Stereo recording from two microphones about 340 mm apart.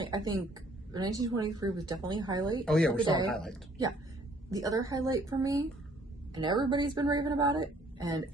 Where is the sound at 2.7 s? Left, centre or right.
Centre.